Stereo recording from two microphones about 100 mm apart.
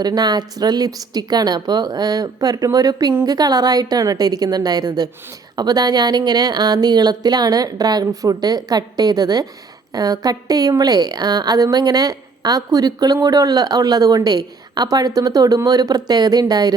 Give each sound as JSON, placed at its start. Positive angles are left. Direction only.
{"t": 0.0, "sound": "speech", "side_deg": -40}